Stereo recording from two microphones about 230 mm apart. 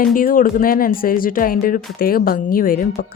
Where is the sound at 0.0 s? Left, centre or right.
Left.